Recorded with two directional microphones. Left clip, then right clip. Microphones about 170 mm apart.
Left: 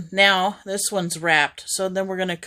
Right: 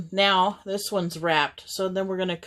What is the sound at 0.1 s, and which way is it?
Speech, 35° left (ahead or behind).